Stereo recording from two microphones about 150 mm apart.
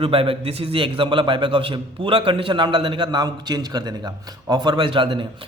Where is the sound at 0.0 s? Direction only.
35° right (ahead or behind).